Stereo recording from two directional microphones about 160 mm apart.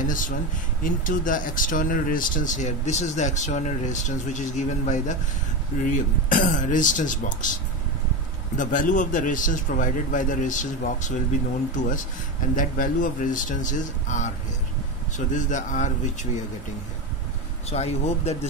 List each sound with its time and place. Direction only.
0.0 s speech: 55° left (ahead or behind)
8.5 s speech: 55° left (ahead or behind)
12.5 s speech: 55° left (ahead or behind)
17.6 s speech: 40° left (ahead or behind)